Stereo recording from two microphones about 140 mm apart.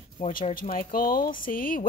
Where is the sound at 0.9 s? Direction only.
90° left.